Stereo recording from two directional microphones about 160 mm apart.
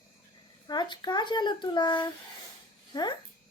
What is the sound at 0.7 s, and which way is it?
Speech, 25° left (ahead or behind).